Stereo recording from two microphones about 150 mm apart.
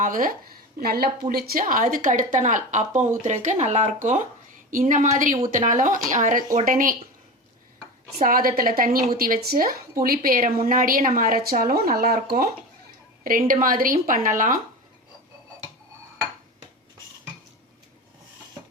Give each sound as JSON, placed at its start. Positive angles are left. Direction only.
{"t": 0.0, "sound": "a woman's voice", "side_deg": -65}
{"t": 0.8, "sound": "a woman's voice", "side_deg": -90}
{"t": 8.2, "sound": "a woman's voice", "side_deg": -70}
{"t": 13.2, "sound": "a woman's voice", "side_deg": -70}